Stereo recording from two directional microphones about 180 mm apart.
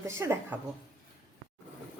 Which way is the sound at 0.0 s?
15° right (ahead or behind).